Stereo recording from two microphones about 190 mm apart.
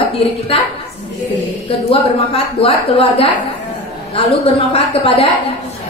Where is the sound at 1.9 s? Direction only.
30° left (ahead or behind).